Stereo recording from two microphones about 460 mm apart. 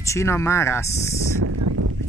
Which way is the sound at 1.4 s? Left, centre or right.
Right.